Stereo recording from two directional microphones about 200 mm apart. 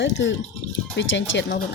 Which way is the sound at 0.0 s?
65° left (ahead or behind).